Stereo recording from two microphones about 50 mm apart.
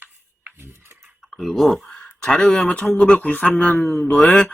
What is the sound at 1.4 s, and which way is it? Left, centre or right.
Speech, centre.